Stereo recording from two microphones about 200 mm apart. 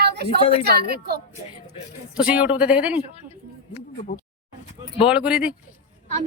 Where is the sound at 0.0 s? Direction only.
55° right (ahead or behind).